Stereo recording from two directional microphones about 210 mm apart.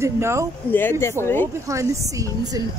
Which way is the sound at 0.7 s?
10° left (ahead or behind).